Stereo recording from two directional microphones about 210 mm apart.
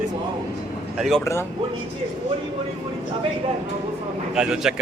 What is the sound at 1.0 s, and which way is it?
Speech, centre (ahead or behind).